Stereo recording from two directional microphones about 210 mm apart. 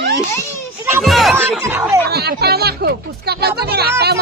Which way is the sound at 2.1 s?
50° right (ahead or behind).